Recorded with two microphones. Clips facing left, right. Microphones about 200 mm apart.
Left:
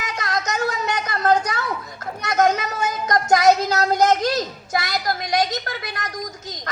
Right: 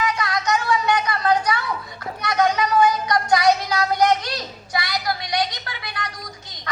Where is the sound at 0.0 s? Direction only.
45° left (ahead or behind).